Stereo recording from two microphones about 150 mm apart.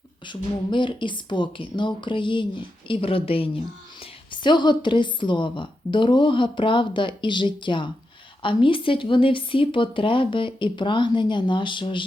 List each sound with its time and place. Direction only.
0.3 s speech: 30° left (ahead or behind)